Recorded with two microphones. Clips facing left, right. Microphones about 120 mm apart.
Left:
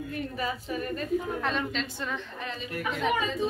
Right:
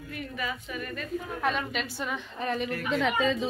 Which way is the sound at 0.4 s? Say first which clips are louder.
Left 2 dB; 35° left (ahead or behind).